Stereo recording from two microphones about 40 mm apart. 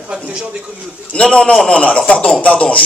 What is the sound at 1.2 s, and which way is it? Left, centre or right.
Speech, left.